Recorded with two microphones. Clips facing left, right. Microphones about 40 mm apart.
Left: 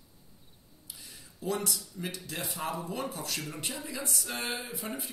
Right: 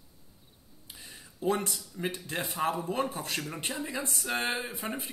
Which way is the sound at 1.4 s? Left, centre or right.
Right.